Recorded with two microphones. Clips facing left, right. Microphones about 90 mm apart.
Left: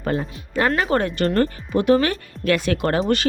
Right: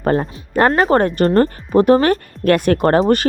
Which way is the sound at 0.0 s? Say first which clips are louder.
Right 7 dB; 45° right (ahead or behind).